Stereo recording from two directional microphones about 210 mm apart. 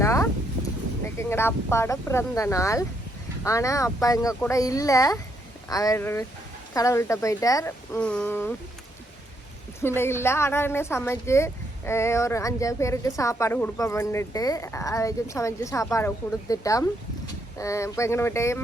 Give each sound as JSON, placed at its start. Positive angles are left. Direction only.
{"t": 0.0, "sound": "a sound", "side_deg": 15}
{"t": 1.2, "sound": "a woman's voice", "side_deg": 10}
{"t": 7.9, "sound": "speech", "side_deg": 5}
{"t": 9.8, "sound": "a woman's voice", "side_deg": 10}